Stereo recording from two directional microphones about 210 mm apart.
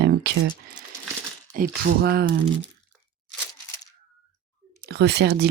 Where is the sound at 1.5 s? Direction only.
45° right (ahead or behind).